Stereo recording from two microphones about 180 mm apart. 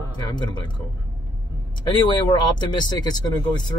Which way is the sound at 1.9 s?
25° left (ahead or behind).